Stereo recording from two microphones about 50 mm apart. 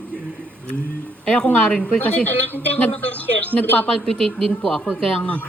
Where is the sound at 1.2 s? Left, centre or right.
Centre.